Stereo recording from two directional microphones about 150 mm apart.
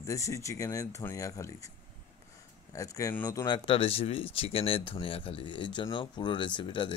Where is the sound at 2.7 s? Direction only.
20° left (ahead or behind).